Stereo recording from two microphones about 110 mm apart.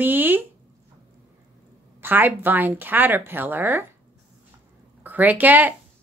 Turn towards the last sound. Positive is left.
turn(degrees=-15)  # may be behind; listen again after turning